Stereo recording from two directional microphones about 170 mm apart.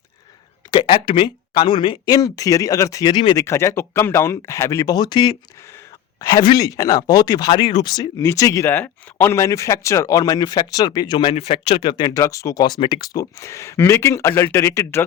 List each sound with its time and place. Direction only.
0.7 s speech: 30° left (ahead or behind)
3.4 s speech: 15° left (ahead or behind)